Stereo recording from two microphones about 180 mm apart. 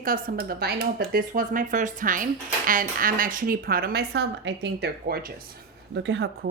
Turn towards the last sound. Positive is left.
turn(degrees=-75)  # may be behind; listen again after turning